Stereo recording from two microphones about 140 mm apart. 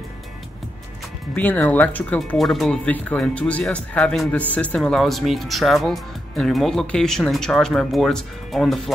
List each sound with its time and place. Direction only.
1.3 s speech: 10° left (ahead or behind)
2.3 s speech: centre (ahead or behind)